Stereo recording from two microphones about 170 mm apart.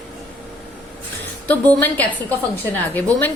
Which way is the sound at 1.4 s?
10° left (ahead or behind).